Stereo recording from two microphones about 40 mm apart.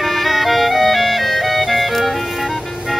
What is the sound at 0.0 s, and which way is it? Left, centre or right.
Music, centre.